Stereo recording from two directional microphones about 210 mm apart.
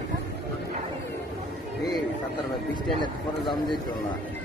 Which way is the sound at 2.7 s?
20° left (ahead or behind).